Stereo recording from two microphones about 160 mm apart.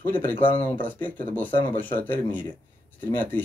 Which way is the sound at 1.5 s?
30° left (ahead or behind).